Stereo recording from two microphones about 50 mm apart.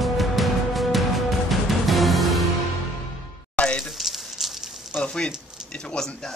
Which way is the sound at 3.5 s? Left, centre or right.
Left.